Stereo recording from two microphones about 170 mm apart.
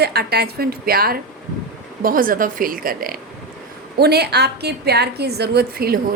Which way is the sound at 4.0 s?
70° right (ahead or behind).